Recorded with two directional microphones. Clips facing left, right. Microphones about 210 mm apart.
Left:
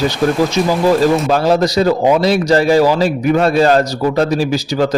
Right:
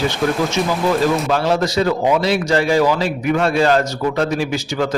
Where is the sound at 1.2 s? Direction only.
40° left (ahead or behind).